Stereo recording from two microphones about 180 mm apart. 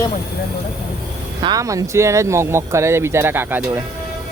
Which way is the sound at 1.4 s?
20° right (ahead or behind).